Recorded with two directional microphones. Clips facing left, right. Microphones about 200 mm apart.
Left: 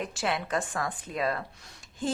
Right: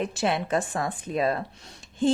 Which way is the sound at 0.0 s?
25° right (ahead or behind).